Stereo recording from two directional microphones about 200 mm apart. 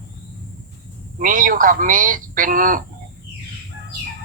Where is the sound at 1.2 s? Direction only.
45° right (ahead or behind).